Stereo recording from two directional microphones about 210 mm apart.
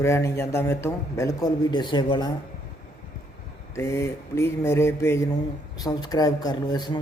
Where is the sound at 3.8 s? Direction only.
15° left (ahead or behind).